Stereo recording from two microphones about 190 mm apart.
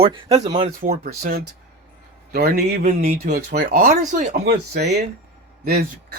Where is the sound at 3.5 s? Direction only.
50° right (ahead or behind).